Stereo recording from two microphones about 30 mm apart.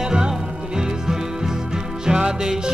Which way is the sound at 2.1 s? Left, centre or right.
Right.